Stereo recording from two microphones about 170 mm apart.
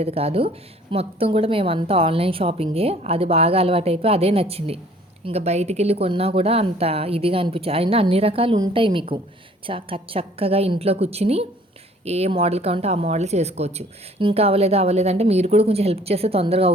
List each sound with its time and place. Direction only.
0.0 s a woman's voice: 35° right (ahead or behind)